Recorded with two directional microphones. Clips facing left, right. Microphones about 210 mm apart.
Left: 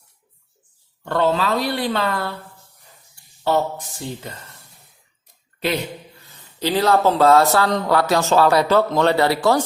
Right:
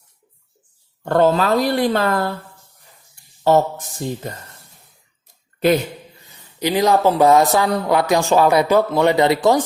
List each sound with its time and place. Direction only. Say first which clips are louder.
1.0 s speech: right 4 dB; 45° right (ahead or behind)
3.4 s speech: right 5 dB; 45° right (ahead or behind)
6.2 s speech: right 2 dB; 15° right (ahead or behind)